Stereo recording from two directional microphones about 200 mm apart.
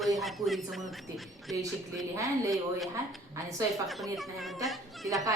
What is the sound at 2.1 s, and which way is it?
Speech, 15° right (ahead or behind).